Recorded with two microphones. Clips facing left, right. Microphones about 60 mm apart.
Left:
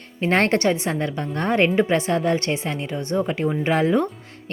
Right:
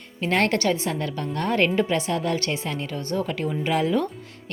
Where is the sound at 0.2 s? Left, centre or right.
Left.